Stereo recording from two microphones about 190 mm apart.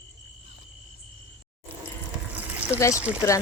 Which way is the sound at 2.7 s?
15° left (ahead or behind).